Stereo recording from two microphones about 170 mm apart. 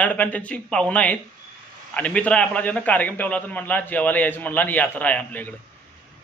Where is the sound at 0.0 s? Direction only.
10° left (ahead or behind).